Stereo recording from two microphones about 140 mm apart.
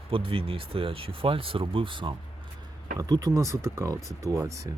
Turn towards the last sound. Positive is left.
turn(degrees=-20)  # may be behind; listen again after turning